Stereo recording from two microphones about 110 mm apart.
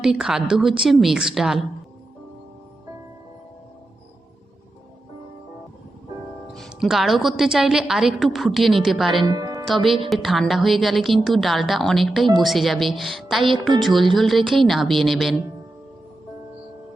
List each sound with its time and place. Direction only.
0.0 s a woman's voice: 5° right (ahead or behind)
6.7 s a woman's voice: 5° right (ahead or behind)
9.2 s music: 35° right (ahead or behind)
10.1 s a woman's voice: centre (ahead or behind)